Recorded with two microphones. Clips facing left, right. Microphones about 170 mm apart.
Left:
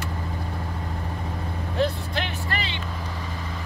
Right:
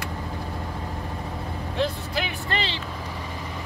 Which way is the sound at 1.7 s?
5° right (ahead or behind).